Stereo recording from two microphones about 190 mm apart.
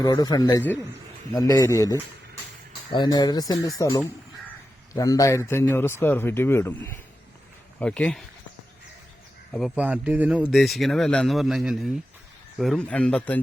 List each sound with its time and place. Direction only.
0.0 s speech: 20° left (ahead or behind)
9.5 s speech: centre (ahead or behind)